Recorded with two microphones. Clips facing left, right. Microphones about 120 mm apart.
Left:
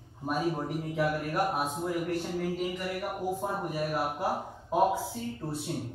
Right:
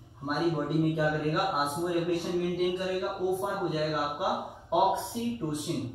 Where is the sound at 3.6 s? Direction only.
5° right (ahead or behind).